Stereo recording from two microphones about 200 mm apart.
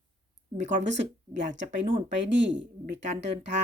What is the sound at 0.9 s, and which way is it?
Speech, 65° right (ahead or behind).